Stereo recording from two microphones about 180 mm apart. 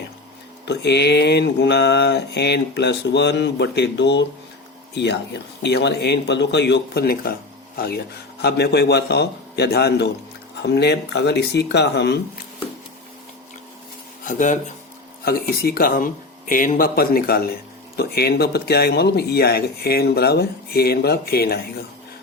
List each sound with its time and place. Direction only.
0.6 s mantra: 70° left (ahead or behind)
5.6 s mantra: 70° left (ahead or behind)
7.8 s speech: 60° left (ahead or behind)
10.6 s mantra: 70° left (ahead or behind)
14.3 s speech: 45° left (ahead or behind)
15.2 s speech: 60° left (ahead or behind)